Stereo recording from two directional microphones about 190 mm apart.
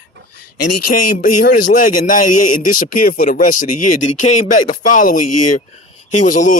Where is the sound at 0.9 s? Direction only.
45° left (ahead or behind).